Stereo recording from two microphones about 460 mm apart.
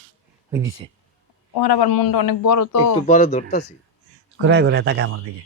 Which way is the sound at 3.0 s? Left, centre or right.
Centre.